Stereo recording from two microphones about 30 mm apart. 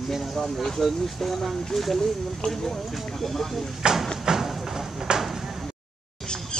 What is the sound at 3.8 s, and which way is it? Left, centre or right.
Speech, right.